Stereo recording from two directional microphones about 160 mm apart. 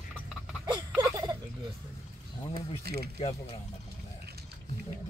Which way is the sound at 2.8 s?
75° right (ahead or behind).